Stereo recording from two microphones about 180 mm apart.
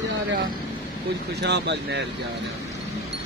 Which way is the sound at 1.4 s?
70° right (ahead or behind).